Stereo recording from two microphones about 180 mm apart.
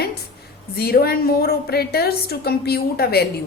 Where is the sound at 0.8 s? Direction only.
60° left (ahead or behind).